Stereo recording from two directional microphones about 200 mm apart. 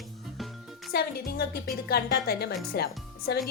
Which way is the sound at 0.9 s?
50° left (ahead or behind).